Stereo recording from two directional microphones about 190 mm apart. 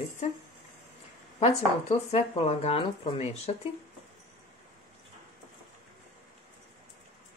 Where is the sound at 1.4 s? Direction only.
35° left (ahead or behind).